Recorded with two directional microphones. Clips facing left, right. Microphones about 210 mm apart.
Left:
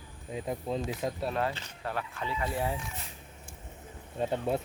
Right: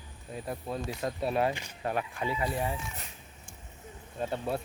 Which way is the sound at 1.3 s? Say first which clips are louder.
Right 3 dB; 15° right (ahead or behind).